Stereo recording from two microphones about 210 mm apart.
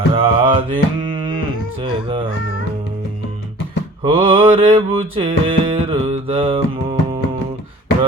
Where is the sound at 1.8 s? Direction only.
25° right (ahead or behind).